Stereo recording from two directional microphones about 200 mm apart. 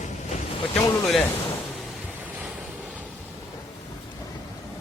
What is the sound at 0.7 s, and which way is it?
Speech, 5° left (ahead or behind).